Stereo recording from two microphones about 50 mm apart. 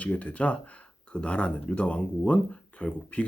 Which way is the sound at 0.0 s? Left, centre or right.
Left.